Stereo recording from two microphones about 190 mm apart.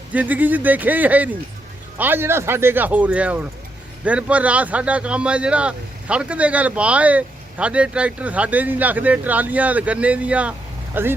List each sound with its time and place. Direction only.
0.1 s speech: 10° right (ahead or behind)